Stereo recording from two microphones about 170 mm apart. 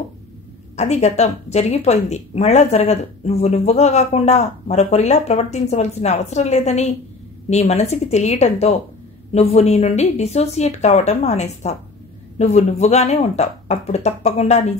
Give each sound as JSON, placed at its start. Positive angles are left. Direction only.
{"t": 0.7, "sound": "a woman's voice", "side_deg": 40}